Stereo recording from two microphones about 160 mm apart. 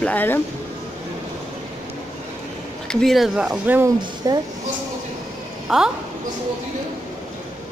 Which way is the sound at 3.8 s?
20° right (ahead or behind).